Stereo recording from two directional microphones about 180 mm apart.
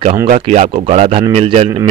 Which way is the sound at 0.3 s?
35° right (ahead or behind).